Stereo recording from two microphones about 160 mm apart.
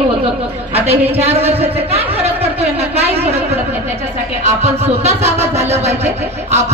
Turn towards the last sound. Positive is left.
turn(degrees=-45)  # may be behind; listen again after turning